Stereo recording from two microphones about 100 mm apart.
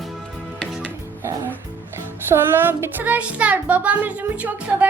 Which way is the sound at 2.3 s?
25° right (ahead or behind).